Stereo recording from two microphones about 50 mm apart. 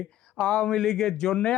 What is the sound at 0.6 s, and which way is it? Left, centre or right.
Speech, centre.